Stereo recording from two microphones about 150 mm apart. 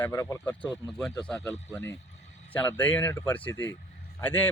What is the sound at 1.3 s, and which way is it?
A man's voice, 20° left (ahead or behind).